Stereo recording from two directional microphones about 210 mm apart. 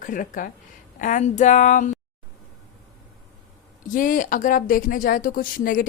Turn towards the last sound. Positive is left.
turn(degrees=40)  # may be behind; listen again after turning